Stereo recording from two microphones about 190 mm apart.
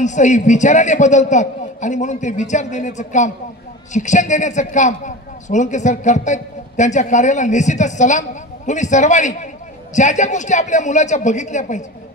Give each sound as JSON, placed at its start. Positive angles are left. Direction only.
{"t": 0.0, "sound": "a woman's voice", "side_deg": 40}